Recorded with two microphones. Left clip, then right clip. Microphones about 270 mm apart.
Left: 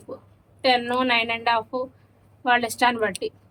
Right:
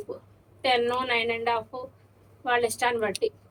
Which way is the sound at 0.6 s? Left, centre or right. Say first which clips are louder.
Left 3 dB; left.